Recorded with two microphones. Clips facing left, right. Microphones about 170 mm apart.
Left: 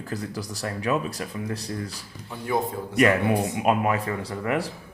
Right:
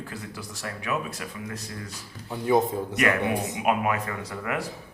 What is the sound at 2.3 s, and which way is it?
Speech, 20° right (ahead or behind).